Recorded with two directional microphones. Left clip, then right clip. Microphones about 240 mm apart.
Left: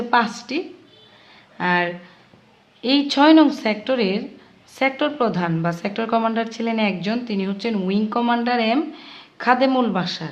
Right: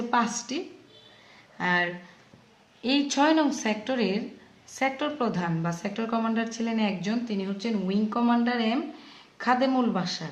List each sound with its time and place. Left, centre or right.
0.1 s a woman's voice: left
1.5 s a woman's voice: left